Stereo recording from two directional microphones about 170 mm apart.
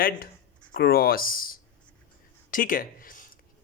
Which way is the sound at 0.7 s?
60° left (ahead or behind).